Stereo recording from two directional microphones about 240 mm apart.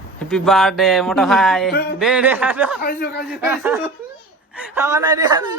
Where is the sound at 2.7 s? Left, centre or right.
Left.